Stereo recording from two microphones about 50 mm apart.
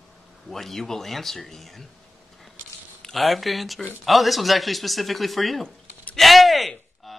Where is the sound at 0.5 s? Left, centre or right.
Centre.